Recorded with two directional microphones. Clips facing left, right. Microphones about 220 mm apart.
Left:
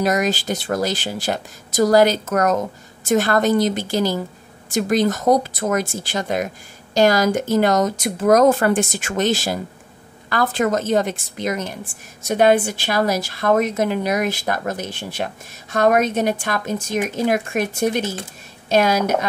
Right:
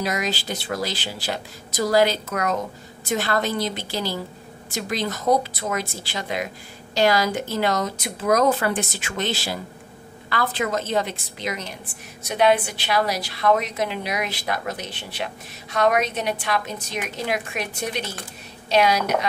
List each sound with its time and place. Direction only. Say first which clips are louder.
0.0 s speech: left 7 dB; 45° left (ahead or behind)